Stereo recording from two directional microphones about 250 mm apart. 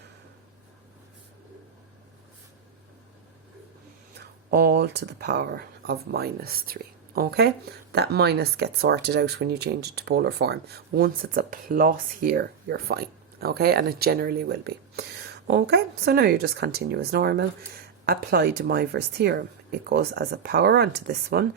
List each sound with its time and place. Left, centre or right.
4.5 s speech: right